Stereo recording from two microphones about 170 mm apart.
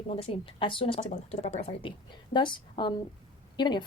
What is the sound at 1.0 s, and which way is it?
Speech, 40° left (ahead or behind).